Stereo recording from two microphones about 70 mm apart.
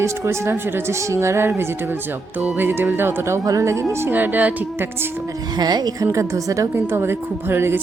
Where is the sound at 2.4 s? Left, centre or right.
Right.